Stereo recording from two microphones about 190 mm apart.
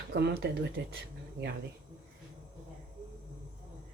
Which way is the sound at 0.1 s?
60° right (ahead or behind).